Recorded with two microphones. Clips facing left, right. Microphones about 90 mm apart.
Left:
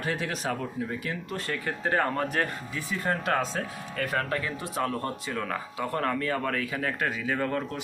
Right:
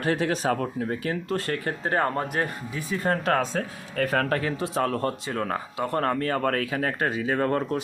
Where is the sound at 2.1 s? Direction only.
20° right (ahead or behind).